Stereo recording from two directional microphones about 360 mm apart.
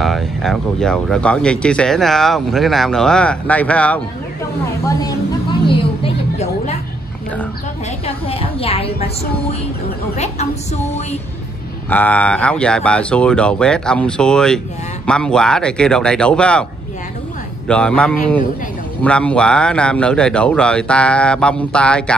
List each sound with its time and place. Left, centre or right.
0.0 s speech: centre
5.7 s a sound: centre
8.0 s a sound: centre
10.1 s a woman's voice: centre
11.9 s speech: centre
17.6 s speech: centre